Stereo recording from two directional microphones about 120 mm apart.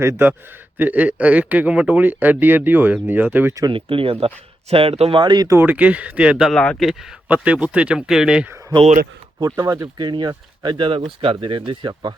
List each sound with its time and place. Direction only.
0.0 s a man's voice: 20° right (ahead or behind)
3.7 s speech: 45° right (ahead or behind)
5.2 s speech: 35° right (ahead or behind)
5.5 s a man's voice: 15° right (ahead or behind)
6.5 s speech: 5° left (ahead or behind)
9.4 s speech: 30° right (ahead or behind)